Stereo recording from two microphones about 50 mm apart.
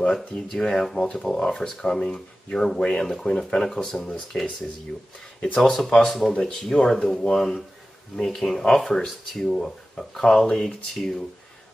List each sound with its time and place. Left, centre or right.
0.0 s speech: centre
5.6 s speech: centre